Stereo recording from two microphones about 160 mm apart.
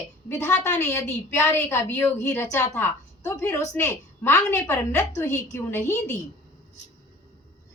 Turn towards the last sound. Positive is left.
turn(degrees=15)  # may be behind; listen again after turning